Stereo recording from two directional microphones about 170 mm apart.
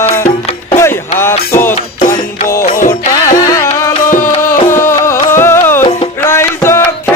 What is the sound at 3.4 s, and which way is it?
Music, 15° left (ahead or behind).